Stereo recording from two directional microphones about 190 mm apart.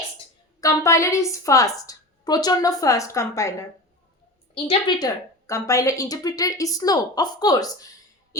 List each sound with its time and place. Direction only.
0.6 s a woman's voice: 15° left (ahead or behind)
4.5 s speech: 20° left (ahead or behind)